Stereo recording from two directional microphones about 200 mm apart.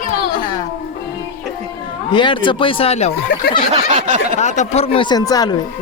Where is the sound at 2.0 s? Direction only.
25° left (ahead or behind).